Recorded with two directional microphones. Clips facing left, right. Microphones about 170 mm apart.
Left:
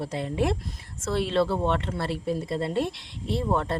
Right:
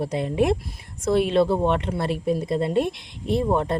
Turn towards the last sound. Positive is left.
turn(degrees=-15)  # may be behind; listen again after turning